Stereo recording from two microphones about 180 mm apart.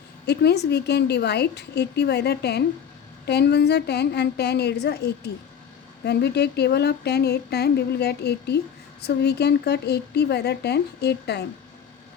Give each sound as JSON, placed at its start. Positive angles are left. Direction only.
{"t": 0.3, "sound": "a woman's voice", "side_deg": 65}